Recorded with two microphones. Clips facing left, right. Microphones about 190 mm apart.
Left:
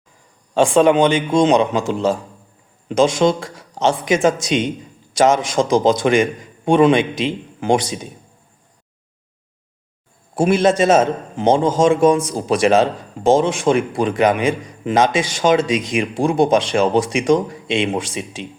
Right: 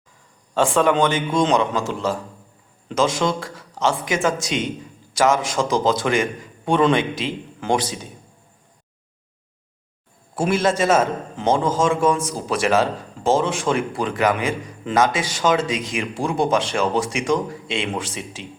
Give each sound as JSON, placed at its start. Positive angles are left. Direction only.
{"t": 0.5, "sound": "a man's voice", "side_deg": 15}
{"t": 10.3, "sound": "a man's voice", "side_deg": 15}